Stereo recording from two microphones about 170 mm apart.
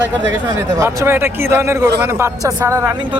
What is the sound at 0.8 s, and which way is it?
Speech, 15° right (ahead or behind).